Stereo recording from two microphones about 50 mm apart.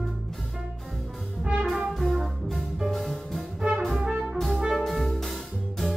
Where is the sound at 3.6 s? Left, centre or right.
Centre.